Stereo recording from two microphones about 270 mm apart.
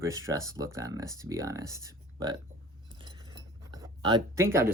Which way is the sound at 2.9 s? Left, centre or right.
Centre.